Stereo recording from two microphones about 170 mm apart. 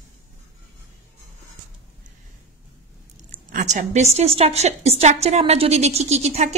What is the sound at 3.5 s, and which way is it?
A woman's voice, 45° right (ahead or behind).